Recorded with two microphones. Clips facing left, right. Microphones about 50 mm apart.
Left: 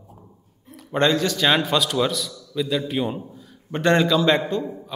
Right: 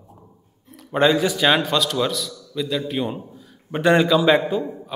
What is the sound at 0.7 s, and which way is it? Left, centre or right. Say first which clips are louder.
Speech: right 2 dB; centre.